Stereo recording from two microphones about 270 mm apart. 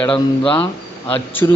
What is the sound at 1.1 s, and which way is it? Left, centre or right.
Speech, centre.